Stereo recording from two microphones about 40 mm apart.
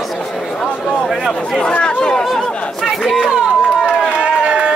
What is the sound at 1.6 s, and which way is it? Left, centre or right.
Speech, left.